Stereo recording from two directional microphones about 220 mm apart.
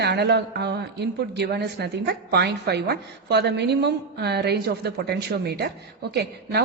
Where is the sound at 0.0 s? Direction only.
50° right (ahead or behind).